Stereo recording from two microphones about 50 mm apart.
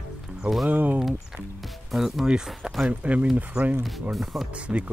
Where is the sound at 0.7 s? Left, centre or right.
Right.